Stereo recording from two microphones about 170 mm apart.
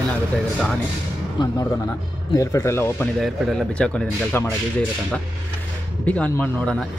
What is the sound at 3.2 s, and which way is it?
Speech, 5° left (ahead or behind).